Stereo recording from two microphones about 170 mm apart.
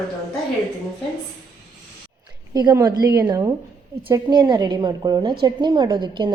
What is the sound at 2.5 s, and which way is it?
A woman's voice, 20° right (ahead or behind).